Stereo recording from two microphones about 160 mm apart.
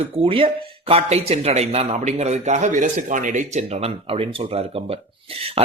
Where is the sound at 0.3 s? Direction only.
35° right (ahead or behind).